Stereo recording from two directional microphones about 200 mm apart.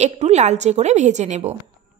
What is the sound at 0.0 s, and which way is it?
A woman's voice, 35° right (ahead or behind).